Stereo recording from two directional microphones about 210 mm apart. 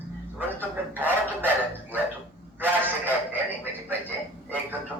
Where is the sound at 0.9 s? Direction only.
10° right (ahead or behind).